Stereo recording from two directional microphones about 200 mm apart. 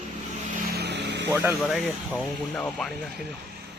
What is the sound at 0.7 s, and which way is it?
Vehicle, 55° right (ahead or behind).